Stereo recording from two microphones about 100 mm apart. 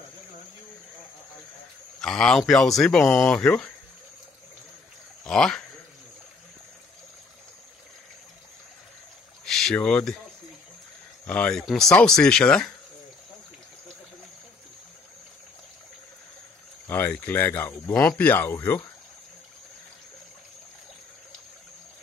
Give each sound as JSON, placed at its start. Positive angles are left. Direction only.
{"t": 2.0, "sound": "speech", "side_deg": 5}
{"t": 5.2, "sound": "speech", "side_deg": 5}
{"t": 9.4, "sound": "boat", "side_deg": 5}
{"t": 9.8, "sound": "speech", "side_deg": 10}
{"t": 11.2, "sound": "speech", "side_deg": 10}
{"t": 16.8, "sound": "a sound", "side_deg": 20}
{"t": 17.1, "sound": "speech", "side_deg": 15}